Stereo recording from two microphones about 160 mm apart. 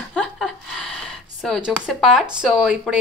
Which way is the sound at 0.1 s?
Centre (ahead or behind).